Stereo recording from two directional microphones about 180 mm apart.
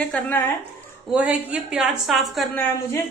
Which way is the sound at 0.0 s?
10° left (ahead or behind).